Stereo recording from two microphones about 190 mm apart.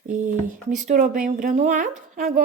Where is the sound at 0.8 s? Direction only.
45° right (ahead or behind).